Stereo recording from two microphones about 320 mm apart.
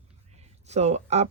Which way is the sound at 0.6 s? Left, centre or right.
Centre.